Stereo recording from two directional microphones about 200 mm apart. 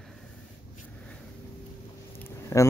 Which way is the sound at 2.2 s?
15° left (ahead or behind).